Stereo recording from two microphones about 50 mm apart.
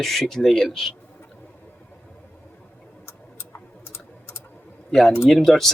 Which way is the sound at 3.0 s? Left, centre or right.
Left.